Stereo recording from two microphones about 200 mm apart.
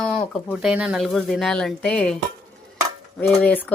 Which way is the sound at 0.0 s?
5° left (ahead or behind).